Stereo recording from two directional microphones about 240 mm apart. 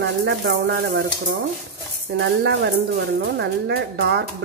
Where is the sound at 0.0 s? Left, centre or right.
Right.